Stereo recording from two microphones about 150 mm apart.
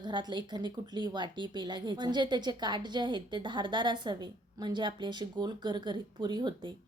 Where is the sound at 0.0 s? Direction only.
30° right (ahead or behind).